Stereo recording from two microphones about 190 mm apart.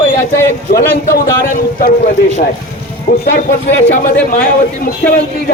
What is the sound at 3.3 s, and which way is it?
A man's voice, 45° left (ahead or behind).